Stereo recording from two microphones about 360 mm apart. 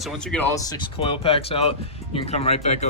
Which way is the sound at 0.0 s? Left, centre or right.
Centre.